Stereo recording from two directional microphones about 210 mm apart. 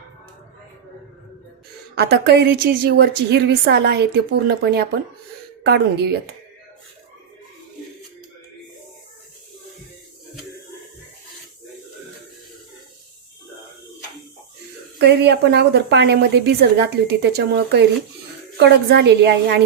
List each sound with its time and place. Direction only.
2.0 s a woman's voice: 50° right (ahead or behind)
14.9 s a woman's voice: 50° right (ahead or behind)